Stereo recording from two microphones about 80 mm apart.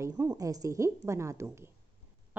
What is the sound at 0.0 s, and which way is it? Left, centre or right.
A woman's voice, right.